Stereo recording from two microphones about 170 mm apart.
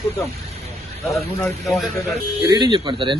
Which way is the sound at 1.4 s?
Centre (ahead or behind).